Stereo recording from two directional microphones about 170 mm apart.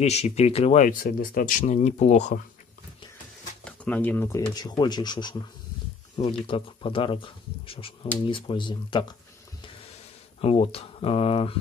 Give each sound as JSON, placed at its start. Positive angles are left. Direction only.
{"t": 0.0, "sound": "speech", "side_deg": 40}
{"t": 3.6, "sound": "speech", "side_deg": 10}
{"t": 4.6, "sound": "speech", "side_deg": 25}
{"t": 10.4, "sound": "speech", "side_deg": 35}